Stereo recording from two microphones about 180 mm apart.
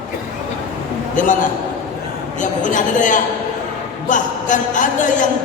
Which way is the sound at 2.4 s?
45° left (ahead or behind).